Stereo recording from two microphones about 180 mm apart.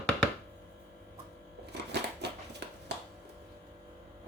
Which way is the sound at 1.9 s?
70° right (ahead or behind).